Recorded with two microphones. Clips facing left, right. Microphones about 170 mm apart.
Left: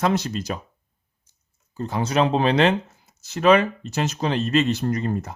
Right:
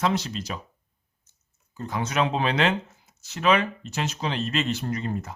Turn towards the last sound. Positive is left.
turn(degrees=45)  # may be behind; listen again after turning